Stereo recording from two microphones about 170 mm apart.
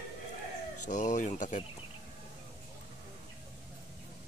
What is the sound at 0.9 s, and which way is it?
Speech, 45° left (ahead or behind).